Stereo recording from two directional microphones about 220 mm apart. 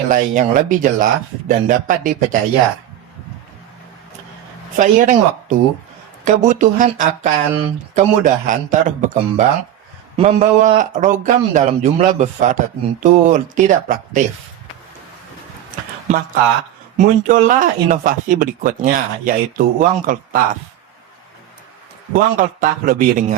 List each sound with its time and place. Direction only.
0.1 s speech: 35° right (ahead or behind)
4.8 s speech: 35° right (ahead or behind)
16.0 s speech: 40° right (ahead or behind)
22.1 s speech: 40° right (ahead or behind)